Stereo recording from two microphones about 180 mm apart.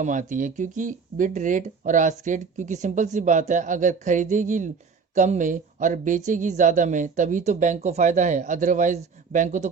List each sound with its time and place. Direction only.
0.0 s speech: 45° right (ahead or behind)